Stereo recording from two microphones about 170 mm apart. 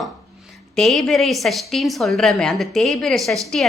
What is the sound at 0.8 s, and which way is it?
A woman's voice, centre (ahead or behind).